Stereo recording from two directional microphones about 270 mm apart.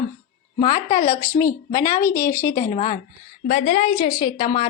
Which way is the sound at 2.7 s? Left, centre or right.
Left.